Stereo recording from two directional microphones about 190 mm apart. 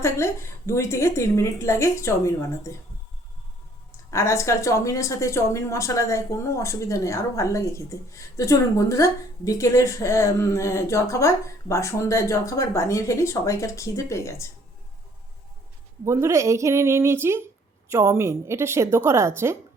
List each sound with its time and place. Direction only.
0.0 s a woman's voice: 15° left (ahead or behind)
4.1 s a woman's voice: 15° left (ahead or behind)
16.0 s a woman's voice: 15° right (ahead or behind)